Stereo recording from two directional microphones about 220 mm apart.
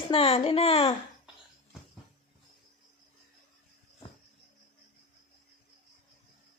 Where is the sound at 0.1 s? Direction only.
25° left (ahead or behind).